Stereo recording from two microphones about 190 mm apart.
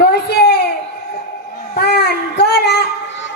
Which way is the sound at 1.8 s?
60° left (ahead or behind).